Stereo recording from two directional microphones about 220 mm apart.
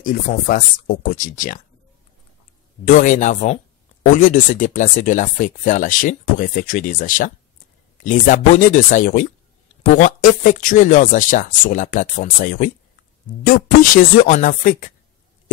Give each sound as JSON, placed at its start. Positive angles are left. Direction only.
{"t": 0.0, "sound": "speech", "side_deg": 35}
{"t": 2.8, "sound": "speech", "side_deg": 35}